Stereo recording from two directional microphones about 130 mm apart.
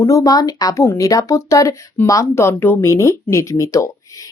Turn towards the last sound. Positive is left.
turn(degrees=25)  # may be behind; listen again after turning